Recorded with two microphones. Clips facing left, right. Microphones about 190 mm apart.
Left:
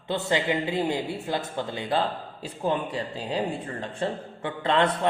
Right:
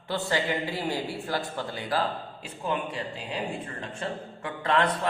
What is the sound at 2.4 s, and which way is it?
A man's voice, 35° left (ahead or behind).